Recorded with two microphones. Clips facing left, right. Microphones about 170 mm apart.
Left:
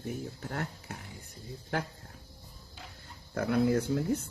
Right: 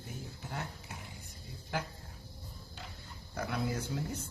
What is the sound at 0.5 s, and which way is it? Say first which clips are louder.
Speech: left 3 dB; 65° left (ahead or behind).